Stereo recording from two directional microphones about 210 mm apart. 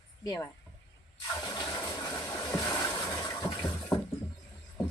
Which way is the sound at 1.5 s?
15° left (ahead or behind).